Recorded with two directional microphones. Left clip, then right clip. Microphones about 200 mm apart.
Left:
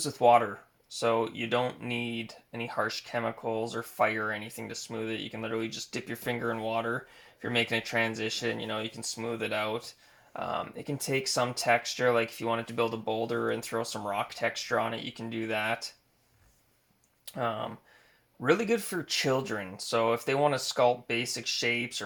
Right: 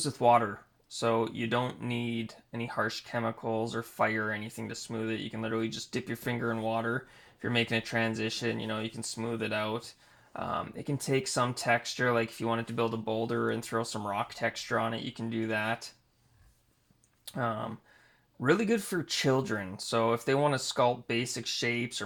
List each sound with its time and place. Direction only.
0.0 s speech: 30° right (ahead or behind)
17.2 s speech: 25° right (ahead or behind)